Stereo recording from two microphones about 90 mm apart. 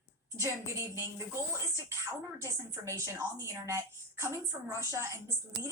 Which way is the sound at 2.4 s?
35° right (ahead or behind).